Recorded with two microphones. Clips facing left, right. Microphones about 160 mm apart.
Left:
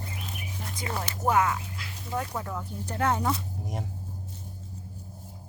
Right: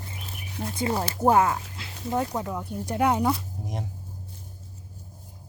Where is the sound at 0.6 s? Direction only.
25° right (ahead or behind).